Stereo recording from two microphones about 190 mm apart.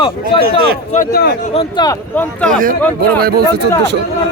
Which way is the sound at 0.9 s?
50° left (ahead or behind).